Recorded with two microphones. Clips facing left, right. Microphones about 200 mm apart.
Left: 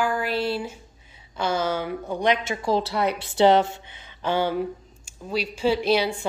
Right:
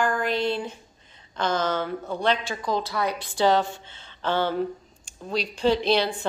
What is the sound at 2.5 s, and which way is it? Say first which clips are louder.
A woman's voice: left 3 dB; 30° left (ahead or behind).